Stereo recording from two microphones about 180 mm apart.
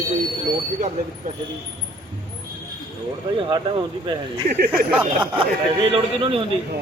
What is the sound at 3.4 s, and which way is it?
Speech, 25° right (ahead or behind).